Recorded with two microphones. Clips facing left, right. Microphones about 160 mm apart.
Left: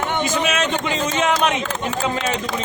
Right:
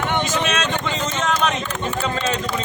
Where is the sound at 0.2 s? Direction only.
10° left (ahead or behind).